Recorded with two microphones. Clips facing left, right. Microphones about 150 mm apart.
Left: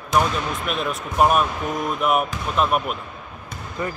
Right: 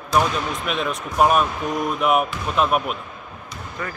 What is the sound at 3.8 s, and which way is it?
Speech, 25° left (ahead or behind).